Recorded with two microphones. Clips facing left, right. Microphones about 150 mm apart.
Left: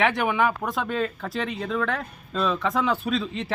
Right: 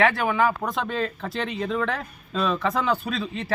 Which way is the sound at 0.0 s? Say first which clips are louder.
Right 1 dB; 20° left (ahead or behind).